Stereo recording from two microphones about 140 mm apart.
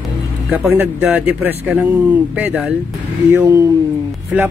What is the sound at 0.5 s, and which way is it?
Speech, 15° right (ahead or behind).